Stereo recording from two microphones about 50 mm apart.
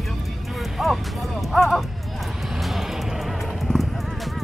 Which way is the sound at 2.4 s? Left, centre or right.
Centre.